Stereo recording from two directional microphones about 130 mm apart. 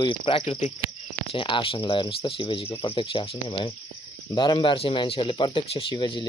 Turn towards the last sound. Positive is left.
turn(degrees=40)  # may be behind; listen again after turning